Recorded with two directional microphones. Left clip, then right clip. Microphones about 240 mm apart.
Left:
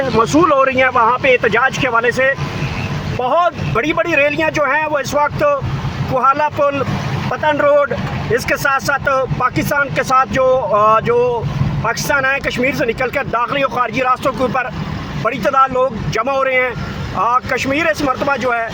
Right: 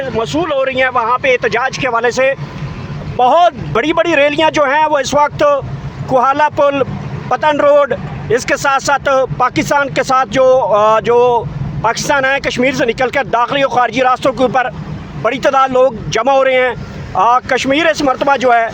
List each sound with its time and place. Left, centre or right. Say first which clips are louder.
0.2 s speech: left 4 dB; centre; by 18.7 s right